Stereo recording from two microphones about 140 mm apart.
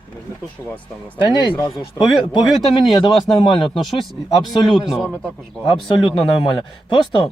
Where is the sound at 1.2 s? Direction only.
35° left (ahead or behind).